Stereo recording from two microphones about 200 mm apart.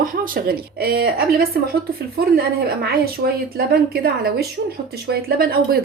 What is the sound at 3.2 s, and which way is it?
Speech, 55° right (ahead or behind).